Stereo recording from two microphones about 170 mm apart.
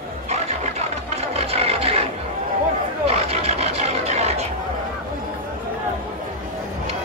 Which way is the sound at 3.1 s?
35° right (ahead or behind).